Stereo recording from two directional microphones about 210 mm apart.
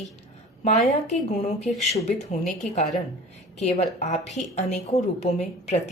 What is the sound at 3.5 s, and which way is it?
A woman's voice, 30° left (ahead or behind).